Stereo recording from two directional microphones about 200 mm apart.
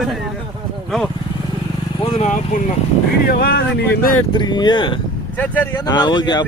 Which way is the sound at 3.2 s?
50° left (ahead or behind).